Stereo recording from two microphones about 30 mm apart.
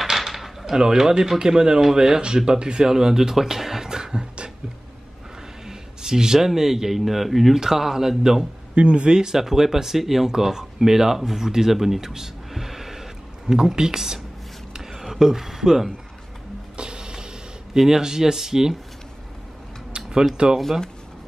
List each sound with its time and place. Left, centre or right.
0.0 s a sound: centre
0.7 s speech: centre
5.7 s speech: centre
8.7 s speech: right
9.4 s speech: centre
12.1 s music: centre
13.5 s speech: centre
14.9 s a sound: centre
16.7 s printer: right
17.7 s speech: centre
20.4 s speech: right